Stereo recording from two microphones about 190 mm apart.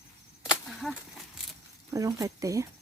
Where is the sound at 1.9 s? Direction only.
15° right (ahead or behind).